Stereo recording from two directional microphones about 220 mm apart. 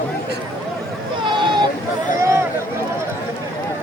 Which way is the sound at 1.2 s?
20° right (ahead or behind).